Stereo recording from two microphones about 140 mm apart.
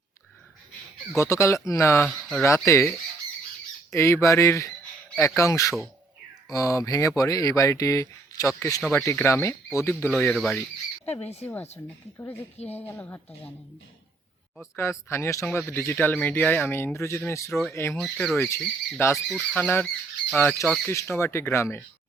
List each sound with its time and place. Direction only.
1.1 s speech: 20° left (ahead or behind)
2.0 s speech: centre (ahead or behind)
2.4 s speech: 20° left (ahead or behind)
3.9 s speech: 20° left (ahead or behind)
9.9 s a man's voice: 10° left (ahead or behind)
10.3 s speech: centre (ahead or behind)
11.1 s speech: 50° left (ahead or behind)
12.1 s a man's voice: 20° left (ahead or behind)
12.5 s speech: 50° left (ahead or behind)
12.8 s a man's voice: 15° left (ahead or behind)
14.8 s a man's voice: 20° left (ahead or behind)
17.9 s speech: 5° left (ahead or behind)
18.3 s a man's voice: 20° left (ahead or behind)